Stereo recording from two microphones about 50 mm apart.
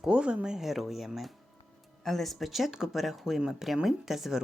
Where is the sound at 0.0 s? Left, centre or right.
Centre.